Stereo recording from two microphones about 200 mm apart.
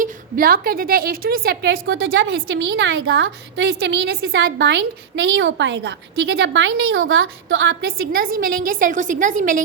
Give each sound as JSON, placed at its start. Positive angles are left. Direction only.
{"t": 0.0, "sound": "a woman's voice", "side_deg": -45}
{"t": 7.8, "sound": "a woman's voice", "side_deg": -50}